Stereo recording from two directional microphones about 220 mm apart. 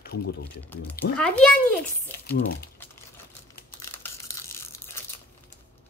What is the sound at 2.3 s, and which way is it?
Speech, 45° left (ahead or behind).